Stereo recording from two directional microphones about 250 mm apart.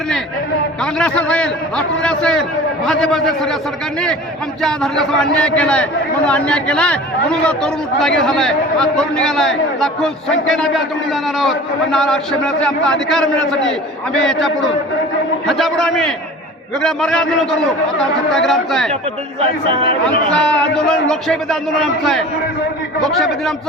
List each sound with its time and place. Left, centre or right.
0.8 s a man's voice: centre
4.6 s a man's voice: centre
19.7 s speech: right
20.1 s a man's voice: centre